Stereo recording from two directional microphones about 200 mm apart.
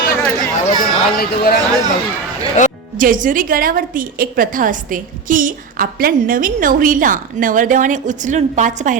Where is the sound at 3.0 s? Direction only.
40° right (ahead or behind).